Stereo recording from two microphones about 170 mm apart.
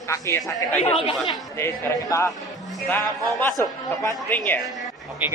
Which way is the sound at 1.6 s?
20° left (ahead or behind).